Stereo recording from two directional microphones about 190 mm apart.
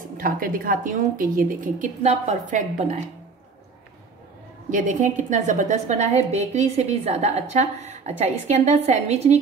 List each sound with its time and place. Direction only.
0.2 s a woman's voice: 50° right (ahead or behind)
4.6 s a woman's voice: 40° right (ahead or behind)